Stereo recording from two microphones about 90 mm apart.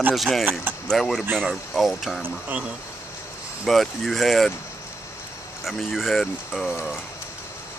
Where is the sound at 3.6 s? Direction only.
Centre (ahead or behind).